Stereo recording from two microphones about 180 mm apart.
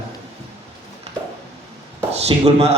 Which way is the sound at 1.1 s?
35° right (ahead or behind).